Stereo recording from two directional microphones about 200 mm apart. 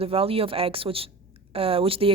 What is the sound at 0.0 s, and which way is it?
Speech, 30° right (ahead or behind).